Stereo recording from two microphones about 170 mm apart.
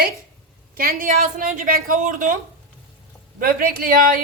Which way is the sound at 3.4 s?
60° right (ahead or behind).